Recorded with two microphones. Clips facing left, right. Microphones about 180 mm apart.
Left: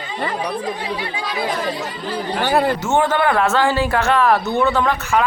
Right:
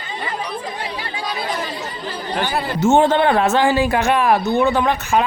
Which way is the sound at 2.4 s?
60° left (ahead or behind).